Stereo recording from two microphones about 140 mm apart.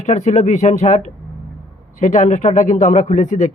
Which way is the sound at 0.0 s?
55° left (ahead or behind).